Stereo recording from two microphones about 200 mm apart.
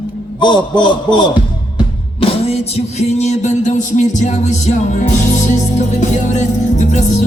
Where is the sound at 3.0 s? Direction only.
35° left (ahead or behind).